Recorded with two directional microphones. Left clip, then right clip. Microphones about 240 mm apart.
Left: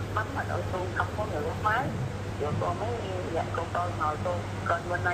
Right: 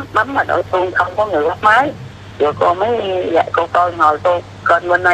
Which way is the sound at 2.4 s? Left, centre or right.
Right.